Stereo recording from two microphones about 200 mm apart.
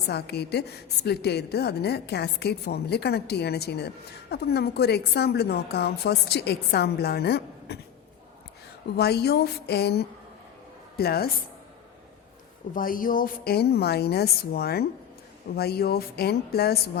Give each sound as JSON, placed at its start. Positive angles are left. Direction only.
{"t": 0.1, "sound": "a woman's voice", "side_deg": 55}
{"t": 9.0, "sound": "a woman's voice", "side_deg": 55}
{"t": 12.7, "sound": "a woman's voice", "side_deg": 45}